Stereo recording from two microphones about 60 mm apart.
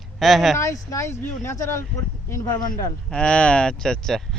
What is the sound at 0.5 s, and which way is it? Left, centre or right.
Speech, left.